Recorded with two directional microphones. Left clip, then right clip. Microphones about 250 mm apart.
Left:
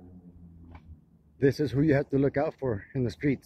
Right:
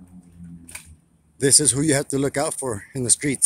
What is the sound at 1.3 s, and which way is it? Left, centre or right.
Speech, centre.